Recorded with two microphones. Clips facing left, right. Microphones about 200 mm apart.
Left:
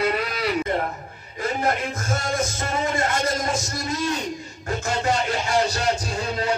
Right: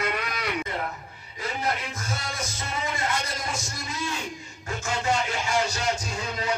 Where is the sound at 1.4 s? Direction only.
50° left (ahead or behind).